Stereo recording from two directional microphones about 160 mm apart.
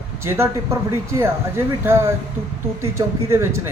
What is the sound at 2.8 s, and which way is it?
Speech, 15° right (ahead or behind).